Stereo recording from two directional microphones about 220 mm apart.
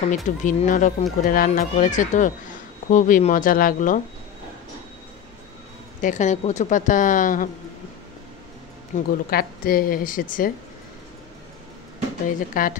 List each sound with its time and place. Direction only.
0.1 s speech: 35° left (ahead or behind)
5.9 s speech: 35° left (ahead or behind)
8.9 s speech: 35° left (ahead or behind)
12.6 s speech: 40° left (ahead or behind)